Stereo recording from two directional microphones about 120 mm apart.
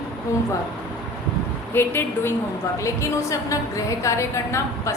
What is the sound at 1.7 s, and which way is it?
A woman's voice, 20° left (ahead or behind).